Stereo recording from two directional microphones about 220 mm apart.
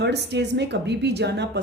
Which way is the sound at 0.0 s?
50° right (ahead or behind).